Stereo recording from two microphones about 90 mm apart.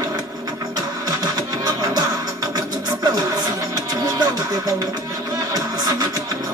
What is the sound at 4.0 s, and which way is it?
Music, 50° right (ahead or behind).